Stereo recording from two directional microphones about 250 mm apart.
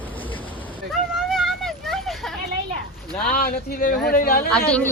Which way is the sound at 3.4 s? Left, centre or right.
Left.